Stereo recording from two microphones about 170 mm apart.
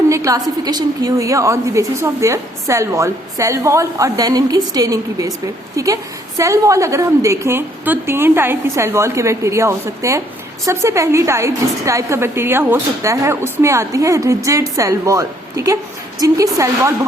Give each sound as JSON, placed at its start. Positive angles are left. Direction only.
{"t": 0.1, "sound": "a woman's voice", "side_deg": -20}